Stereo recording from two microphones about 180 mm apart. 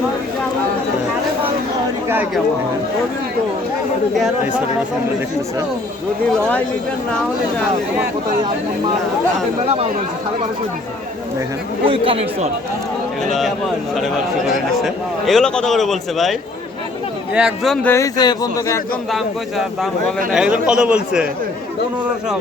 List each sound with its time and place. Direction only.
11.9 s speech: 30° right (ahead or behind)
13.2 s speech: centre (ahead or behind)
17.3 s speech: 5° right (ahead or behind)
17.8 s speech: 15° left (ahead or behind)
19.1 s speech: centre (ahead or behind)